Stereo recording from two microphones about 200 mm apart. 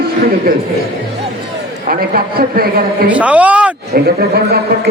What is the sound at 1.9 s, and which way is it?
A man's voice, 45° right (ahead or behind).